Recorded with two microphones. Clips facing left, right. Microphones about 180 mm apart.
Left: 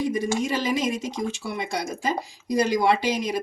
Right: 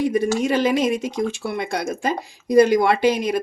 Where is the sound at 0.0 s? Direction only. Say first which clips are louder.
Right 5 dB; 60° right (ahead or behind).